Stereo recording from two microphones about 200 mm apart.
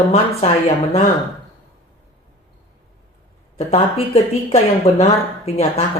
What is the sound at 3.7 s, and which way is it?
Speech, 30° left (ahead or behind).